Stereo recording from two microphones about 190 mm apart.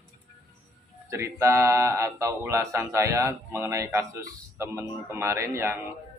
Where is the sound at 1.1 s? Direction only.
15° right (ahead or behind).